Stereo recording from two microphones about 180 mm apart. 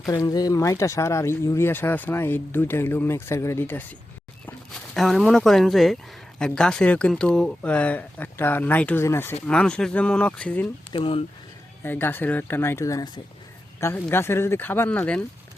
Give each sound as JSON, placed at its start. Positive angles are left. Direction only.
{"t": 0.1, "sound": "speech", "side_deg": 20}
{"t": 4.9, "sound": "speech", "side_deg": 0}
{"t": 10.9, "sound": "speech", "side_deg": 30}
{"t": 11.8, "sound": "speech", "side_deg": 10}